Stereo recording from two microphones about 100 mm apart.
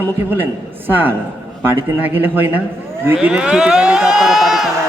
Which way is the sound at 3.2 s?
10° right (ahead or behind).